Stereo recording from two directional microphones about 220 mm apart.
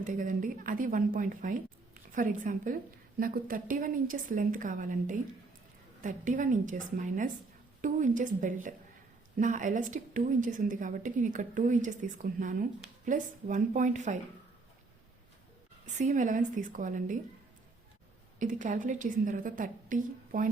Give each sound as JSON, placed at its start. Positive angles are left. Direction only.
{"t": 0.0, "sound": "a woman's voice", "side_deg": -35}
{"t": 16.0, "sound": "a woman's voice", "side_deg": -35}
{"t": 18.3, "sound": "a woman's voice", "side_deg": -35}